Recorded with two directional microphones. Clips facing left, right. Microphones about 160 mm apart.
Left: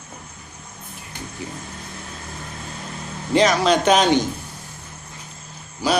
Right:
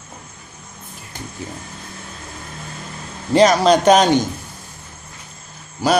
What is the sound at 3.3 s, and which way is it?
Speech, 40° right (ahead or behind).